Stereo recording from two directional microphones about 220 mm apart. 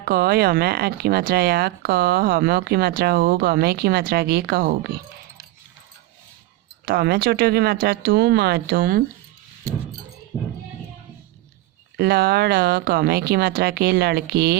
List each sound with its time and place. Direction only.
0.0 s speech: 45° right (ahead or behind)
6.8 s speech: 45° right (ahead or behind)
11.9 s speech: 45° right (ahead or behind)